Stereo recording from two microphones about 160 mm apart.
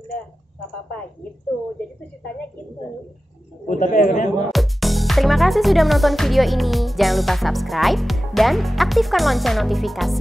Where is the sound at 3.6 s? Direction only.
55° left (ahead or behind).